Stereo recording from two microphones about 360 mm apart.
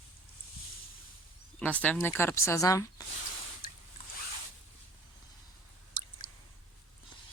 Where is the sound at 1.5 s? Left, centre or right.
Centre.